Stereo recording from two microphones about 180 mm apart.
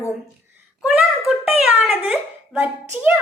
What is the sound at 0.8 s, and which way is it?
A child's voice, centre (ahead or behind).